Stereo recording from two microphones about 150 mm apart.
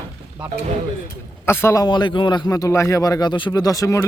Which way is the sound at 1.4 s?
15° left (ahead or behind).